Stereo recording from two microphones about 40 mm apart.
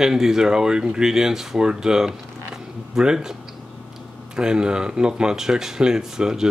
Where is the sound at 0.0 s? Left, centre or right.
Centre.